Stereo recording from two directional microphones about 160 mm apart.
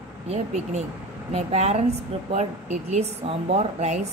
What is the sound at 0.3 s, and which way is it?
Speech, 45° right (ahead or behind).